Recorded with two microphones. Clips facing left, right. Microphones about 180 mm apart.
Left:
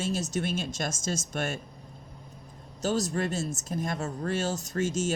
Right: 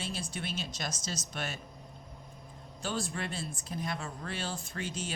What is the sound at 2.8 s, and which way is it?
Speech, 40° left (ahead or behind).